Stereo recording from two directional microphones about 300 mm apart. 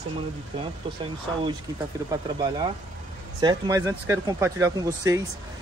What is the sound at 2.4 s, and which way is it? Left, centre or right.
Speech, centre.